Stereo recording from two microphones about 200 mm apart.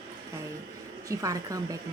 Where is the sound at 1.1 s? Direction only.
15° right (ahead or behind).